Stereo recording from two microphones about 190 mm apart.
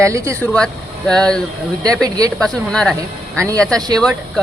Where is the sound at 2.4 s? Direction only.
5° left (ahead or behind).